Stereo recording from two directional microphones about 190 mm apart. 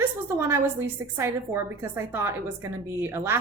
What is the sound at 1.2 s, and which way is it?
A woman's voice, 15° right (ahead or behind).